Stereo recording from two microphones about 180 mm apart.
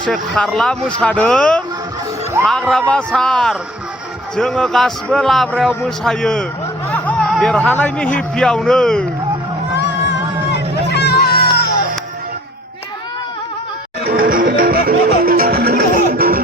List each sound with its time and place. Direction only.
0.0 s a man's voice: 5° left (ahead or behind)
6.9 s a sound: 5° left (ahead or behind)
8.4 s a man's voice: 5° left (ahead or behind)
9.7 s music: 75° left (ahead or behind)
10.9 s a sound: 65° left (ahead or behind)
14.1 s music: 50° right (ahead or behind)